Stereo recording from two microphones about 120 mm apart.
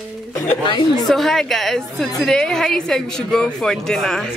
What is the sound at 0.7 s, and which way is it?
Speech, 40° left (ahead or behind).